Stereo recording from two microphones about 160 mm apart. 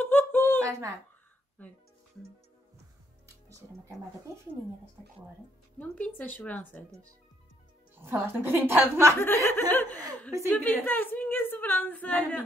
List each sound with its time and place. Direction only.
0.0 s a sound: 10° left (ahead or behind)
0.7 s speech: 20° right (ahead or behind)
3.4 s speech: 20° right (ahead or behind)
5.8 s a woman's voice: 10° left (ahead or behind)
7.9 s a woman's voice: 15° right (ahead or behind)
9.2 s a woman's voice: 15° left (ahead or behind)